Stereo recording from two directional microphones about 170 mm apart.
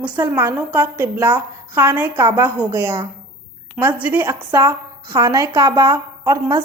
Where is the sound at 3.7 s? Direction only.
10° right (ahead or behind).